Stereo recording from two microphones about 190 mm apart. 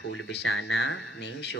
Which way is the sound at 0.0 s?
85° left.